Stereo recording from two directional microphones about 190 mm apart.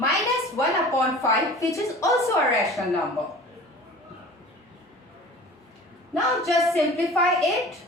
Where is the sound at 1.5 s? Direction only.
15° left (ahead or behind).